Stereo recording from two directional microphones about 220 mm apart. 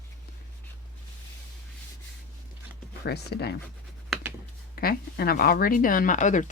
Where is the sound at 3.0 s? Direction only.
45° left (ahead or behind).